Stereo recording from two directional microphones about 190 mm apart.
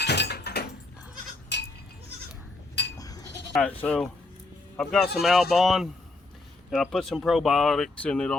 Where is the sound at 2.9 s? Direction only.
20° left (ahead or behind).